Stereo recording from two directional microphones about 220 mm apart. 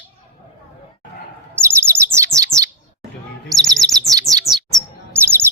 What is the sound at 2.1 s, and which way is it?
Bird, 15° right (ahead or behind).